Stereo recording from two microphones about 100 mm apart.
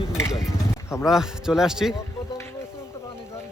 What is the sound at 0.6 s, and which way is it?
Music, 30° left (ahead or behind).